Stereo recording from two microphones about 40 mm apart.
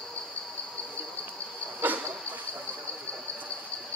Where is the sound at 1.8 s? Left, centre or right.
Right.